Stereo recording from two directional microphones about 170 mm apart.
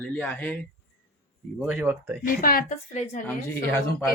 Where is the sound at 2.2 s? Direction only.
55° left (ahead or behind).